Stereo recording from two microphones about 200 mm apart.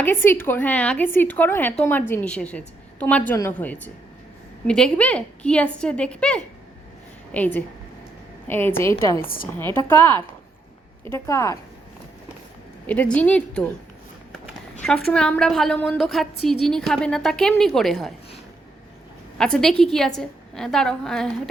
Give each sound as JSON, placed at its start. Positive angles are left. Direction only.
{"t": 0.0, "sound": "a woman's voice", "side_deg": 10}
{"t": 9.2, "sound": "a woman's voice", "side_deg": 45}
{"t": 9.7, "sound": "a woman's voice", "side_deg": 10}
{"t": 12.9, "sound": "a woman's voice", "side_deg": 5}
{"t": 19.4, "sound": "a woman's voice", "side_deg": 5}